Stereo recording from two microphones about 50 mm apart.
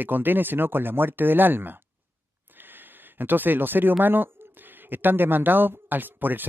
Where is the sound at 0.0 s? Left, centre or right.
Right.